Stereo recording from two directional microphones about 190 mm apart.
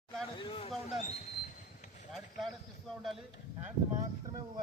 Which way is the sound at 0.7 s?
Centre (ahead or behind).